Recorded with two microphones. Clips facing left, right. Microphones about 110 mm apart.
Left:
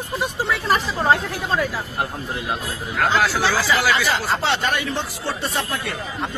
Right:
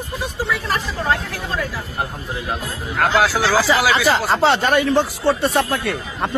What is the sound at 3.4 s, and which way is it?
Speech, 75° right (ahead or behind).